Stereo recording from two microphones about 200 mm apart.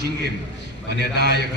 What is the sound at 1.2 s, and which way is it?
Speech, 50° right (ahead or behind).